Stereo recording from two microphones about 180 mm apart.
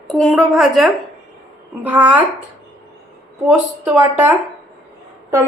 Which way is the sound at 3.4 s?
10° right (ahead or behind).